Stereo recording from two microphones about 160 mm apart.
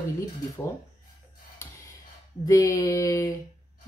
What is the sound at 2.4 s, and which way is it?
Speech, 20° left (ahead or behind).